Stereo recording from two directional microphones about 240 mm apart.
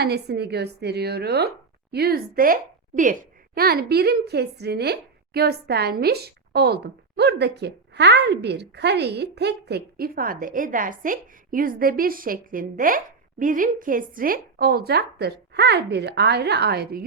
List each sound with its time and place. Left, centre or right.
0.0 s speech: right